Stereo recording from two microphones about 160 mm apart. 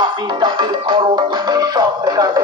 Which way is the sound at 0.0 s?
30° right (ahead or behind).